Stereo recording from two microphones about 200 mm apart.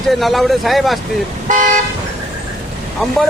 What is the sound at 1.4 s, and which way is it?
Car, 40° right (ahead or behind).